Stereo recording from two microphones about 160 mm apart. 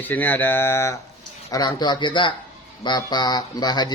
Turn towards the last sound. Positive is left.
turn(degrees=25)  # may be behind; listen again after turning